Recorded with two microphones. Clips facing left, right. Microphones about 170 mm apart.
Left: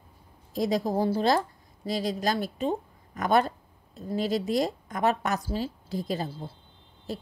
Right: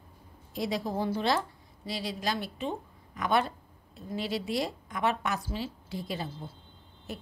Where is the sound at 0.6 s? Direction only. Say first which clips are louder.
Left 5 dB; 40° left (ahead or behind).